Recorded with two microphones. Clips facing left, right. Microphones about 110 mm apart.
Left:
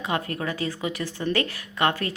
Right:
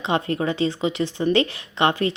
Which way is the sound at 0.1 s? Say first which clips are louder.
Right 6 dB; 25° right (ahead or behind).